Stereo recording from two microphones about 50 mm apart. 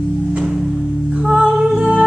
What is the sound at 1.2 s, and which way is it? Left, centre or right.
Music, centre.